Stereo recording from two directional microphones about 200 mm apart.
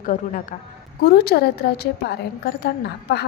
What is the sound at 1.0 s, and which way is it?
A woman's voice, 50° left (ahead or behind).